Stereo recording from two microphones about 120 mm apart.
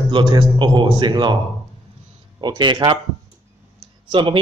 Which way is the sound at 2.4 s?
40° right (ahead or behind).